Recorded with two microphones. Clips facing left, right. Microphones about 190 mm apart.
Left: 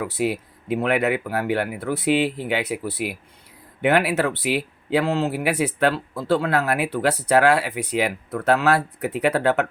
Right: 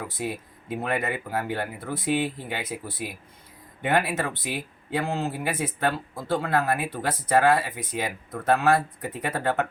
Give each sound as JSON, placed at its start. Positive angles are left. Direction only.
{"t": 0.0, "sound": "speech", "side_deg": 70}